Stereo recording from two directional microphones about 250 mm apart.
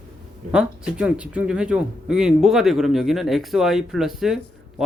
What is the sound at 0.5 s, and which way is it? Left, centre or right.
Speech, centre.